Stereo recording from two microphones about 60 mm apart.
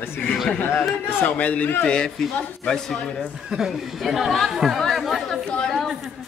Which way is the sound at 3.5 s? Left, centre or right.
Centre.